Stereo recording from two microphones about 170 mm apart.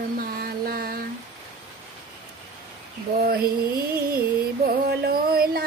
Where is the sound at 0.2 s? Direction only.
60° right (ahead or behind).